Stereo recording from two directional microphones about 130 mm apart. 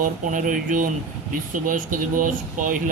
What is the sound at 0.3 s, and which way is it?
Speech, 90° right.